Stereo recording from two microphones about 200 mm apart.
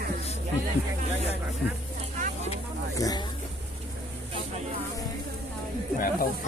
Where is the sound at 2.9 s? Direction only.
15° left (ahead or behind).